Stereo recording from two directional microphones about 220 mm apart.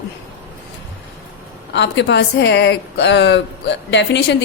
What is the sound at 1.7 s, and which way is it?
A woman's voice, 55° left (ahead or behind).